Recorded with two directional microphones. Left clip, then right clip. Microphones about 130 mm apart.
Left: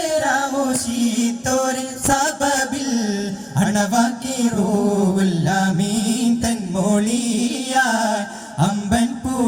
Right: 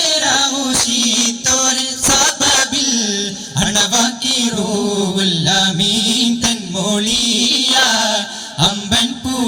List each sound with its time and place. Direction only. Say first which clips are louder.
0.0 s music: right 4 dB; 60° left (ahead or behind)
4.5 s chant: right 1 dB; 25° left (ahead or behind)
4.9 s mantra: right 4 dB; 55° left (ahead or behind)